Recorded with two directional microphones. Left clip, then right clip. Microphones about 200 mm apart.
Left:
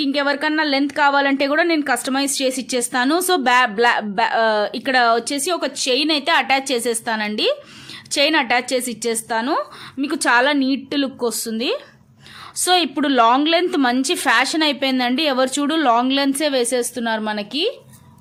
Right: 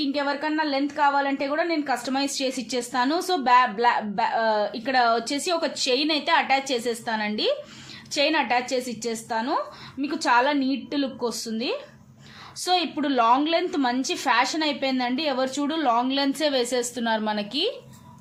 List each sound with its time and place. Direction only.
0.0 s a woman's voice: 40° left (ahead or behind)